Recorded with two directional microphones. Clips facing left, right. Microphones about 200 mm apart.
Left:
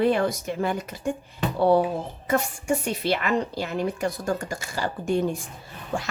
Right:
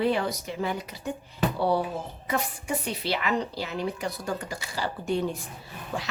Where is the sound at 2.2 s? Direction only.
50° left (ahead or behind).